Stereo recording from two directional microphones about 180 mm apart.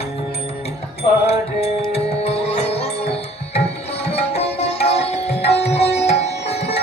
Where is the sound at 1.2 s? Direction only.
35° left (ahead or behind).